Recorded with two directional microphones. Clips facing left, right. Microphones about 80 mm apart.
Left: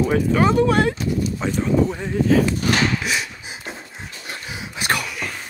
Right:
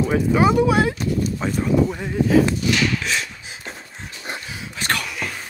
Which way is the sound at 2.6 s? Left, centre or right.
Left.